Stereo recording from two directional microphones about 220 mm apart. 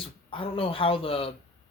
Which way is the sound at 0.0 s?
25° left (ahead or behind).